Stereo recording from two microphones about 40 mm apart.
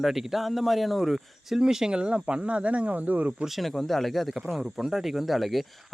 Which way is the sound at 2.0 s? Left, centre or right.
Right.